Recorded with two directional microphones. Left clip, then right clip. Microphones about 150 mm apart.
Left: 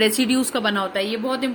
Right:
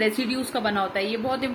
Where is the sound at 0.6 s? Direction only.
30° left (ahead or behind).